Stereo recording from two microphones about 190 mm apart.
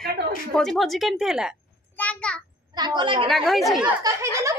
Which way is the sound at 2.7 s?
25° right (ahead or behind).